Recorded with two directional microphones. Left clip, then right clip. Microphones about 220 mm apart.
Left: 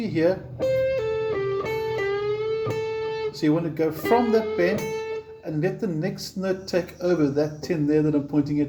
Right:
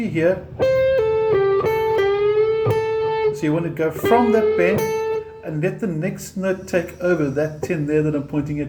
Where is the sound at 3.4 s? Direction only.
15° left (ahead or behind).